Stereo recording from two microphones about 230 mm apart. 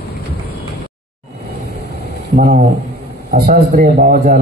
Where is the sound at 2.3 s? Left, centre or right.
Right.